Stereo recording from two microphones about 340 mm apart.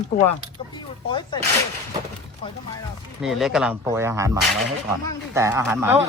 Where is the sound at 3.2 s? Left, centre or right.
Centre.